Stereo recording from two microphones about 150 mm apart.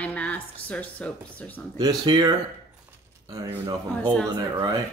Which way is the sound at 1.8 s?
25° right (ahead or behind).